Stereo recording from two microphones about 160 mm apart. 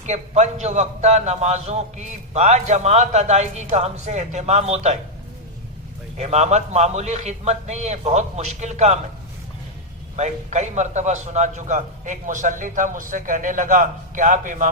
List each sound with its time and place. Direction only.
0.0 s a man's voice: 45° right (ahead or behind)
6.1 s a man's voice: 45° right (ahead or behind)
10.2 s a man's voice: 45° right (ahead or behind)